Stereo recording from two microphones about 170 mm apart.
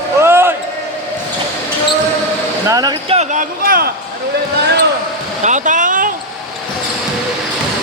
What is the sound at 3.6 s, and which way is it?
Speech, 60° right (ahead or behind).